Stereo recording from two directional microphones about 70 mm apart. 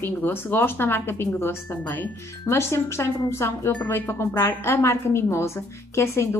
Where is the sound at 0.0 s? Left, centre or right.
Left.